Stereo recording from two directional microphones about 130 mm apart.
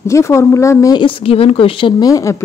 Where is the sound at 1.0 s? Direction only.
45° left (ahead or behind).